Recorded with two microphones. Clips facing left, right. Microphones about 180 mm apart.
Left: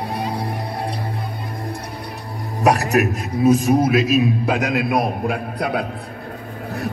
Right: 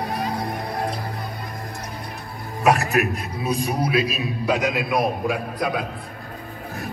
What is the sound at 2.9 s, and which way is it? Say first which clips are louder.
A man's voice: left 4 dB; 45° left (ahead or behind).